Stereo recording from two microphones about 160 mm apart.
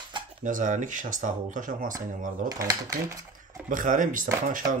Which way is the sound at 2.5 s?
20° right (ahead or behind).